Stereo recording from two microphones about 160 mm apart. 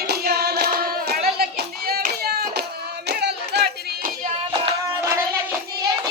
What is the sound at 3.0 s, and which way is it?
Hands, 90° right.